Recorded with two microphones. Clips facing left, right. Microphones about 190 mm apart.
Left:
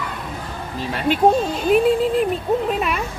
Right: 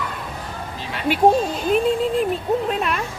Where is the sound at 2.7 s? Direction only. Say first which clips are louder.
Left 1 dB; 5° left (ahead or behind).